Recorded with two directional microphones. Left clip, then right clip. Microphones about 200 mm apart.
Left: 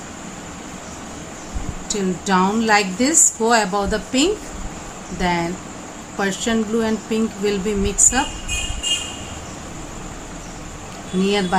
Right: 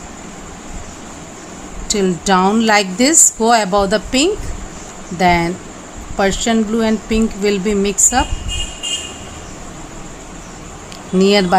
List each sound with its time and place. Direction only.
1.9 s a woman's voice: 45° right (ahead or behind)
11.2 s a woman's voice: 45° right (ahead or behind)